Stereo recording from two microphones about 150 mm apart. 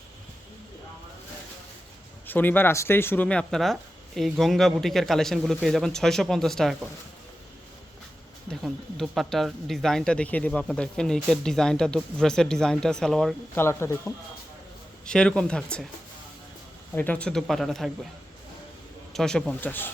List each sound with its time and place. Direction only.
2.2 s speech: 15° left (ahead or behind)
8.4 s speech: centre (ahead or behind)
13.6 s speech: 15° left (ahead or behind)
15.0 s speech: 5° left (ahead or behind)
16.9 s speech: 10° left (ahead or behind)
19.1 s speech: 5° left (ahead or behind)